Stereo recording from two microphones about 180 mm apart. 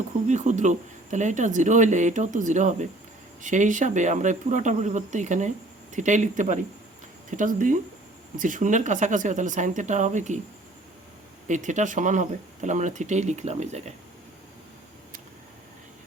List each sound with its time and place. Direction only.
0.3 s speech: 40° right (ahead or behind)
11.4 s speech: 40° right (ahead or behind)